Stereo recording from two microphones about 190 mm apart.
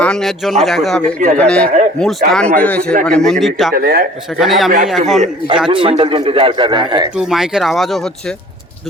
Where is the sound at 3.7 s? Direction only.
50° right (ahead or behind).